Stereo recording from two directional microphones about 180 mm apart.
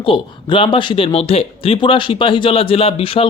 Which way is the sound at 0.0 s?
30° left (ahead or behind).